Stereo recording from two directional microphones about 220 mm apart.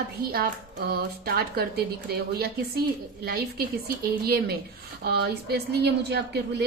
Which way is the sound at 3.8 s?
45° right (ahead or behind).